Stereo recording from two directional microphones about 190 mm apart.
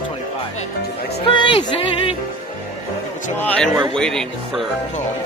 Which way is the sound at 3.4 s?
5° left (ahead or behind).